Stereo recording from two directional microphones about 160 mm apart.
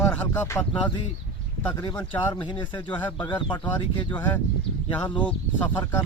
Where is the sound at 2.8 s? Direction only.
10° left (ahead or behind).